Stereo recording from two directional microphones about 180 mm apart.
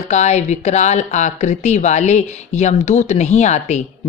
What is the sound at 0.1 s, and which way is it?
Speech, 40° left (ahead or behind).